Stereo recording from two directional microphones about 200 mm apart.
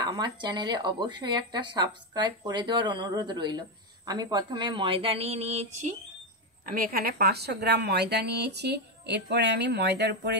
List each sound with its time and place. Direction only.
0.0 s speech: 20° right (ahead or behind)
6.6 s a woman's voice: 45° right (ahead or behind)